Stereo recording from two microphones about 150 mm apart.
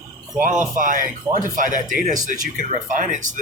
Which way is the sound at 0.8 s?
65° right (ahead or behind).